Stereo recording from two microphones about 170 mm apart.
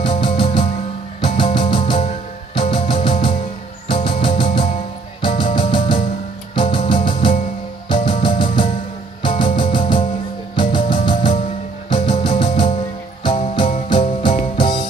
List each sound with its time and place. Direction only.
0.0 s music: 30° left (ahead or behind)